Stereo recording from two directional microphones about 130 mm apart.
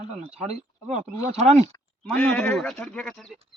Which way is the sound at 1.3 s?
55° right (ahead or behind).